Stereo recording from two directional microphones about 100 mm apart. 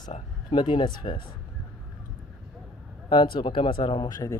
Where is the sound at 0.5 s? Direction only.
50° left (ahead or behind).